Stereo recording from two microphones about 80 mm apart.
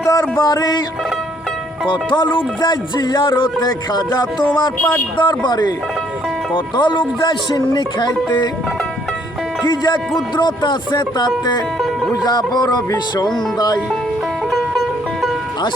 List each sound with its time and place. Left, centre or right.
0.0 s a sound: left
0.3 s music: left
1.9 s speech: left
4.1 s speech: left
5.1 s speech: left
6.5 s speech: left
9.6 s music: left
10.2 s speech: left
11.8 s music: centre
12.1 s music: left
14.5 s music: centre